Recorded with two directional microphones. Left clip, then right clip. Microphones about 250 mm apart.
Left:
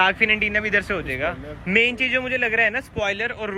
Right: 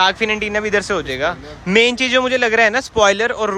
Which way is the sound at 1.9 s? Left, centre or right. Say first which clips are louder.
Right 6 dB; right.